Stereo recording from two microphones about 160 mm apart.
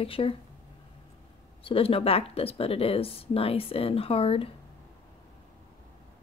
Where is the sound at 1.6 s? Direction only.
35° left (ahead or behind).